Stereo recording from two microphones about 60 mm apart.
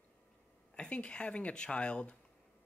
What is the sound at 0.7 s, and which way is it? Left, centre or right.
Speech, centre.